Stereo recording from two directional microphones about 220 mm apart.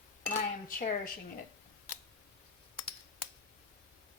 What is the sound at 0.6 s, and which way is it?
Speech, 40° left (ahead or behind).